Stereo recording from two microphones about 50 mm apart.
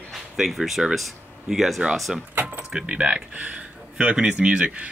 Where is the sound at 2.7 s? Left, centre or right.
Right.